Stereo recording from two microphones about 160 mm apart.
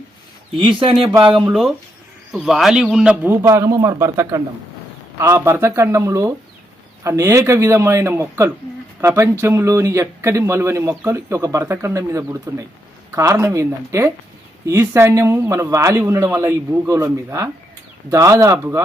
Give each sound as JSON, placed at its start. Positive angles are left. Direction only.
{"t": 1.2, "sound": "speech", "side_deg": -30}
{"t": 1.5, "sound": "speech", "side_deg": -5}
{"t": 3.4, "sound": "a man's voice", "side_deg": -20}